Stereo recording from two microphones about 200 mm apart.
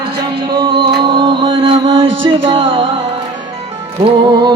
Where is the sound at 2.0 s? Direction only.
70° right (ahead or behind).